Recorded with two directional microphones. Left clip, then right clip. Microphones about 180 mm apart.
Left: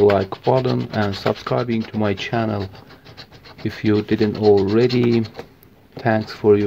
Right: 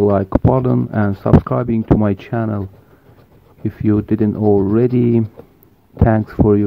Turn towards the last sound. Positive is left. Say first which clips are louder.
# right 1 dB
turn(degrees=-20)  # may be behind; listen again after turning